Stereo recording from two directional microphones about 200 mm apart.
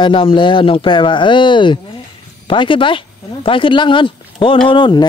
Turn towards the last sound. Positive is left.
turn(degrees=20)  # may be behind; listen again after turning